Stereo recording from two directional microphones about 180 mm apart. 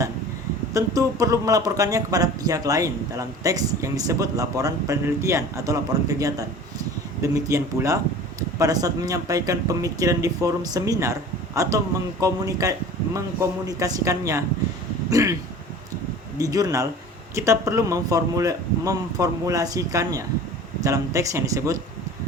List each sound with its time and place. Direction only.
0.7 s speech: 20° right (ahead or behind)
16.4 s speech: 20° right (ahead or behind)